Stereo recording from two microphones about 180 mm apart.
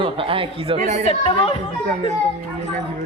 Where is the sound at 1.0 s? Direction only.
35° left (ahead or behind).